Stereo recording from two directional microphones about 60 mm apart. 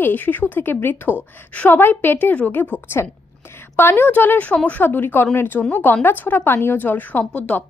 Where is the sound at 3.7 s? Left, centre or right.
Left.